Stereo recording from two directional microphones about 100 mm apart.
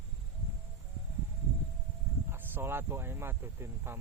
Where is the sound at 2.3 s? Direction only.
25° right (ahead or behind).